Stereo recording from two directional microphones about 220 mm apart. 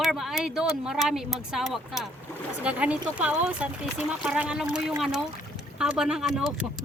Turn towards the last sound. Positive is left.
turn(degrees=-5)  # may be behind; listen again after turning